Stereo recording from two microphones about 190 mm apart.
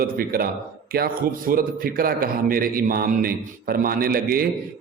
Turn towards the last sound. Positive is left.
turn(degrees=-50)  # may be behind; listen again after turning